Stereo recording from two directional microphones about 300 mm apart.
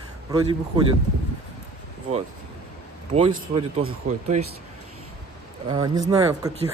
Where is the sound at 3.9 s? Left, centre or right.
Right.